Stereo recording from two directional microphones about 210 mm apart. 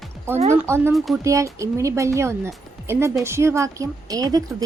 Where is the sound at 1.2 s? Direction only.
15° right (ahead or behind).